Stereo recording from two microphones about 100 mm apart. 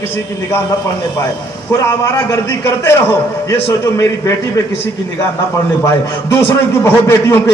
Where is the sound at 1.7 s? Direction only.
30° left (ahead or behind).